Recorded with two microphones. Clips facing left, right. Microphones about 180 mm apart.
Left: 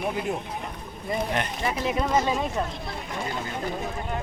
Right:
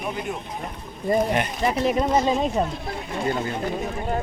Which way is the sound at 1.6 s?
25° right (ahead or behind).